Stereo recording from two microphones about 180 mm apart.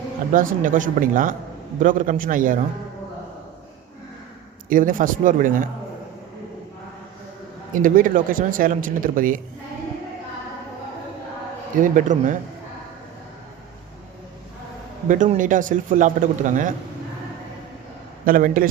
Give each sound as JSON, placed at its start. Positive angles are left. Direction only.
{"t": 0.3, "sound": "speech", "side_deg": -50}
{"t": 4.7, "sound": "speech", "side_deg": -50}
{"t": 7.8, "sound": "speech", "side_deg": -50}
{"t": 11.8, "sound": "speech", "side_deg": -45}
{"t": 15.0, "sound": "speech", "side_deg": -45}
{"t": 18.3, "sound": "speech", "side_deg": -50}